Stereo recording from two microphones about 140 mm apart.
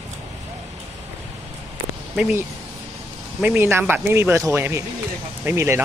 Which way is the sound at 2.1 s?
10° right (ahead or behind).